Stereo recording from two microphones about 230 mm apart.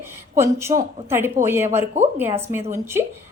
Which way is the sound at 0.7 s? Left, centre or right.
Right.